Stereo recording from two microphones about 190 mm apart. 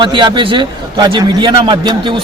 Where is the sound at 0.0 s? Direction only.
25° right (ahead or behind).